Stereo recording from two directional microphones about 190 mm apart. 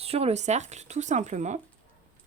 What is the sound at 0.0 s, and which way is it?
Speech, 30° right (ahead or behind).